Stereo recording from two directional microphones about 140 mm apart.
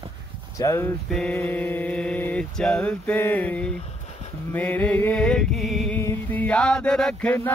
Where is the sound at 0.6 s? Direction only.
20° left (ahead or behind).